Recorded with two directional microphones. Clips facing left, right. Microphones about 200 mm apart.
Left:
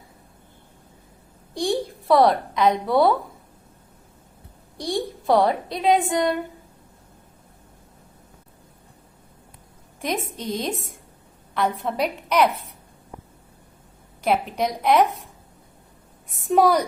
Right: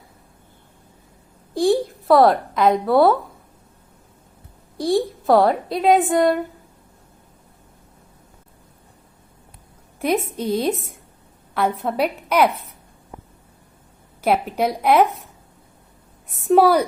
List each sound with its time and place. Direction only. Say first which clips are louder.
1.5 s a sound: right 6 dB; centre (ahead or behind)
2.8 s a woman's voice: right 5 dB; 55° right (ahead or behind)
4.8 s a woman's voice: right 7 dB; 5° right (ahead or behind)
6.1 s a woman's voice: right 5 dB; 50° right (ahead or behind)
10.0 s a woman's voice: right 6 dB; 10° right (ahead or behind)
14.2 s a woman's voice: right 3 dB; 5° right (ahead or behind)
16.4 s a woman's voice: right 3 dB; centre (ahead or behind)